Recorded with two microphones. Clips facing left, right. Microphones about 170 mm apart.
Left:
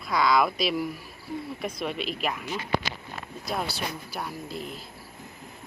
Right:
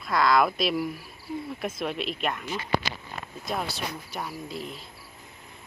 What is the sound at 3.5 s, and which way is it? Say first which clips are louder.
Speech: even; centre (ahead or behind).